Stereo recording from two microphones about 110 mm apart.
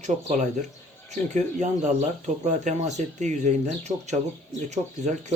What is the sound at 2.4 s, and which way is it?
Speech, 90° right.